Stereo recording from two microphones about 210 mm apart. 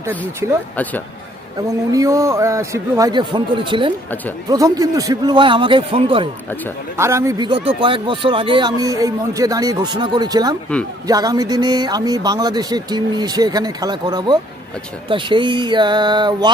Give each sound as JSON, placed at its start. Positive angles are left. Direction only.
{"t": 1.6, "sound": "a man's voice", "side_deg": -15}
{"t": 6.9, "sound": "speech", "side_deg": -15}